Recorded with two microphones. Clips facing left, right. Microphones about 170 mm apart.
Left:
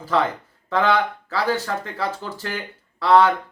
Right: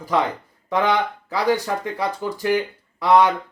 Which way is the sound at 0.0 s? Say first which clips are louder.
Even; 15° right (ahead or behind).